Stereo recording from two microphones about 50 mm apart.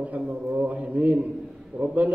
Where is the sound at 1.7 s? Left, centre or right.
Centre.